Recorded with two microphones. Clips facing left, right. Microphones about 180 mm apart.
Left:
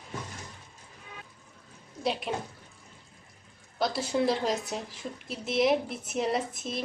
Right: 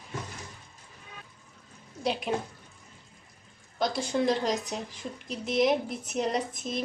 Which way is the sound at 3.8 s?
5° left (ahead or behind).